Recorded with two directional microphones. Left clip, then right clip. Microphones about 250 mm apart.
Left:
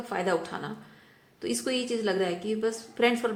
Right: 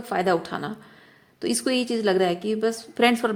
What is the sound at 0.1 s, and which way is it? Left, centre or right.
A woman's voice, right.